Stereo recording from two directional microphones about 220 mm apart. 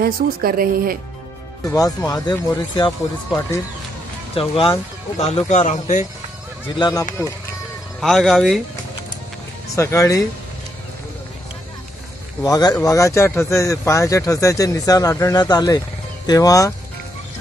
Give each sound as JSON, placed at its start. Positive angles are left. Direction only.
{"t": 0.0, "sound": "a woman's voice", "side_deg": -45}
{"t": 1.7, "sound": "speech", "side_deg": 15}
{"t": 4.4, "sound": "speech", "side_deg": 25}
{"t": 6.7, "sound": "speech", "side_deg": 20}
{"t": 8.0, "sound": "speech", "side_deg": 0}
{"t": 9.8, "sound": "speech", "side_deg": 15}
{"t": 12.4, "sound": "speech", "side_deg": 15}